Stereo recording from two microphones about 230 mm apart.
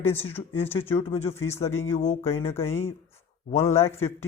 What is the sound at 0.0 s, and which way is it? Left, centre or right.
Speech, centre.